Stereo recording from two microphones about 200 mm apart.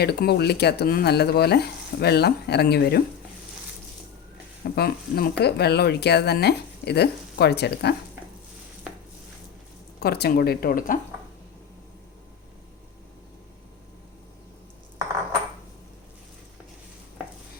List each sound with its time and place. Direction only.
0.0 s speech: 55° left (ahead or behind)
4.6 s speech: 50° left (ahead or behind)
10.0 s speech: 50° left (ahead or behind)